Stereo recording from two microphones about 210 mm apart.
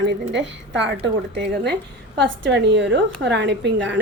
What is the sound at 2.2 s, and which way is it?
A woman's voice, 60° right (ahead or behind).